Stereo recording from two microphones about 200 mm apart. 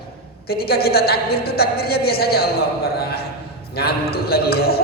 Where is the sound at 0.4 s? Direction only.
50° left (ahead or behind).